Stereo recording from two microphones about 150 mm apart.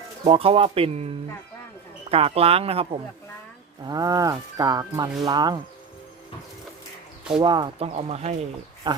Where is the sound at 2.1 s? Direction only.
40° right (ahead or behind).